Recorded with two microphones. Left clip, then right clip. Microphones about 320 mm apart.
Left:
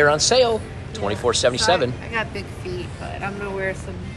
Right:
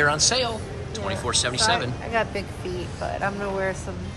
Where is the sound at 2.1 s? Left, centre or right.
Right.